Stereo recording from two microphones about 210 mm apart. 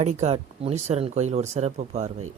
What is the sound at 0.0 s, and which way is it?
A man's voice, 30° right (ahead or behind).